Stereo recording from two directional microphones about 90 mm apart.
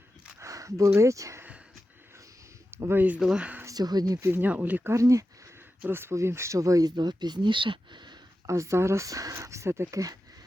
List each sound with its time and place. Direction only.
0.3 s a sound: 35° right (ahead or behind)
2.6 s speech: 25° right (ahead or behind)
3.2 s speech: 10° right (ahead or behind)
3.6 s speech: 40° right (ahead or behind)
4.3 s speech: 20° right (ahead or behind); by 8.2 s 55° right (ahead or behind)
8.4 s speech: 35° right (ahead or behind)
9.8 s speech: 45° right (ahead or behind)